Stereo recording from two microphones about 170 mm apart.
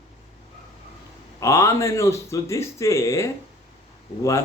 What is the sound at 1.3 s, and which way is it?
A man's voice, 20° left (ahead or behind).